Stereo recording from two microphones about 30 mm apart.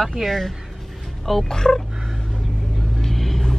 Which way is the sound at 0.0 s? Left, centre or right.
Centre.